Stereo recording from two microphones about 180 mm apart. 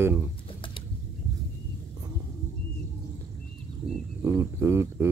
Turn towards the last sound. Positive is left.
turn(degrees=-15)  # may be behind; listen again after turning